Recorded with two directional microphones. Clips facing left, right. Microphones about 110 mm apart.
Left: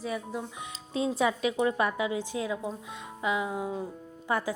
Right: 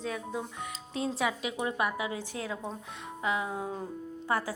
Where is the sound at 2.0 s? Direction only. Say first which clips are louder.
Left 5 dB; 20° left (ahead or behind).